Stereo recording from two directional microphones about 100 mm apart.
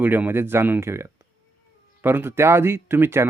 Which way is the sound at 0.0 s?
20° right (ahead or behind).